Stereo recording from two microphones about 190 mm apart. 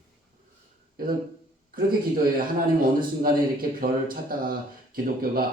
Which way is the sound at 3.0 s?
50° right (ahead or behind).